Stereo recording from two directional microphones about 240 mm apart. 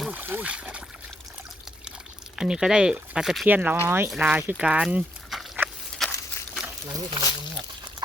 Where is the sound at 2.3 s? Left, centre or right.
Centre.